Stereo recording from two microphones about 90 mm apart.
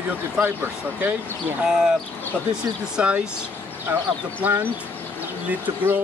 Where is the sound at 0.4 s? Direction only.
20° right (ahead or behind).